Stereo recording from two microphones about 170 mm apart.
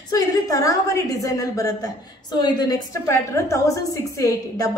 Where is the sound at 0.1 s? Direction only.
20° left (ahead or behind).